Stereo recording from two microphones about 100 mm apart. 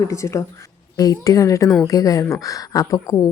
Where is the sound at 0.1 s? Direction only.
30° left (ahead or behind).